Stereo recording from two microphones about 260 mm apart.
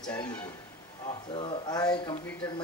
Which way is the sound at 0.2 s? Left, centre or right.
Centre.